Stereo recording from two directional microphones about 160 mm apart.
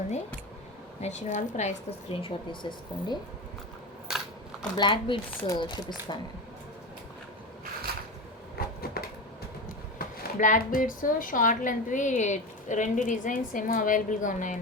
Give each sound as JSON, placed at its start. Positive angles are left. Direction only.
{"t": 1.0, "sound": "speech", "side_deg": 50}
{"t": 2.2, "sound": "speech", "side_deg": 30}
{"t": 4.8, "sound": "speech", "side_deg": 30}
{"t": 7.9, "sound": "a sound", "side_deg": -70}
{"t": 8.6, "sound": "a sound", "side_deg": 75}
{"t": 10.0, "sound": "speech", "side_deg": 55}